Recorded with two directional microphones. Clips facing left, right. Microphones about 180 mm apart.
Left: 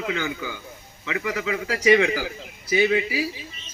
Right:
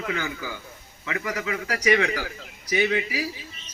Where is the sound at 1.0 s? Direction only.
35° right (ahead or behind).